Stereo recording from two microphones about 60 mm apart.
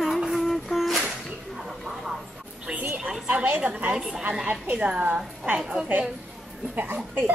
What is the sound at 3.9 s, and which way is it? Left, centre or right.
Speech, centre.